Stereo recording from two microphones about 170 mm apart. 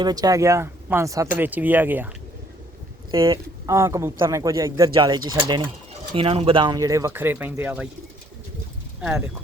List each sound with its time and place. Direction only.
0.0 s speech: 25° right (ahead or behind)
3.1 s speech: 20° right (ahead or behind)
9.0 s speech: 10° right (ahead or behind)